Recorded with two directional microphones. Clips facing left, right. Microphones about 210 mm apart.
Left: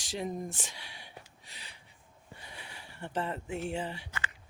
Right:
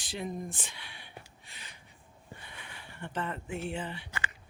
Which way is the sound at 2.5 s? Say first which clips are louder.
Even; 35° left (ahead or behind).